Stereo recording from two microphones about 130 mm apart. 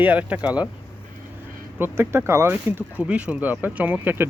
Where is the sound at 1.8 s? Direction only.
20° right (ahead or behind).